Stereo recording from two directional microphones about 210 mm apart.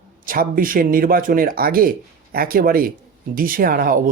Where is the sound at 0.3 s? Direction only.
40° right (ahead or behind).